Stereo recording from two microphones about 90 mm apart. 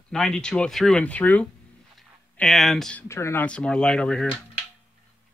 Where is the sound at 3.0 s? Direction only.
30° left (ahead or behind).